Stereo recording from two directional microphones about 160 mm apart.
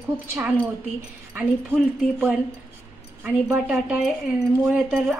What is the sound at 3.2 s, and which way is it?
A woman's voice, 10° right (ahead or behind).